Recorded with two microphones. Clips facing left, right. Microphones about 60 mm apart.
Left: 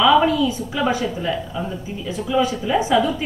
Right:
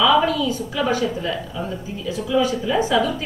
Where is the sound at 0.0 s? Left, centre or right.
Centre.